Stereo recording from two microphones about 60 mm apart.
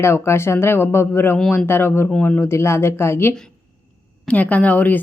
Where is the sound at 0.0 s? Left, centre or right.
Left.